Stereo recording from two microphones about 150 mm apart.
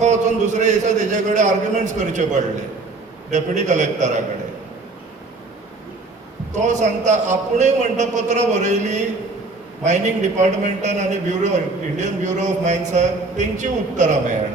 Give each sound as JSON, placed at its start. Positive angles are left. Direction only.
{"t": 0.0, "sound": "a man's voice", "side_deg": -50}
{"t": 6.5, "sound": "a man's voice", "side_deg": -55}